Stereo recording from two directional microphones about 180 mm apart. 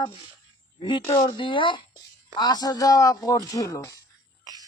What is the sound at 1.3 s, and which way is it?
Speech, 25° left (ahead or behind).